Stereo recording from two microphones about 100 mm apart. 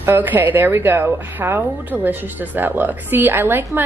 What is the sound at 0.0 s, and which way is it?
Speech, 20° right (ahead or behind).